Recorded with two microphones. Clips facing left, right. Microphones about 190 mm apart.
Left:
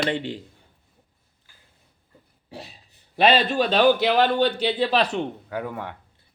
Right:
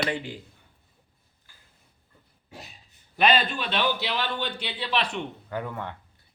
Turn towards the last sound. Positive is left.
turn(degrees=10)  # may be behind; listen again after turning